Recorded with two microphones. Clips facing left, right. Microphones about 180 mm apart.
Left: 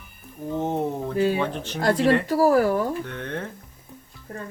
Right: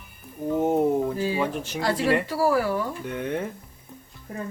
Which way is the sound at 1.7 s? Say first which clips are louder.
Left 4 dB; 50° left (ahead or behind).